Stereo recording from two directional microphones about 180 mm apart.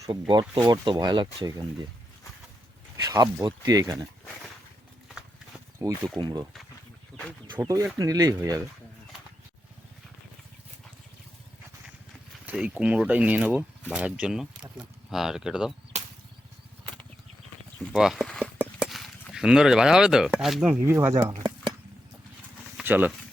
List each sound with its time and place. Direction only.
0.0 s speech: 25° right (ahead or behind)
3.0 s speech: 20° right (ahead or behind)
5.0 s horse: 5° right (ahead or behind)
6.1 s speech: 25° right (ahead or behind)
7.6 s speech: 20° right (ahead or behind)
12.5 s speech: 5° right (ahead or behind)
15.9 s chop: 40° right (ahead or behind)
17.7 s speech: centre (ahead or behind)
18.6 s a sound: centre (ahead or behind)
20.4 s speech: 5° right (ahead or behind)
22.8 s speech: 10° right (ahead or behind)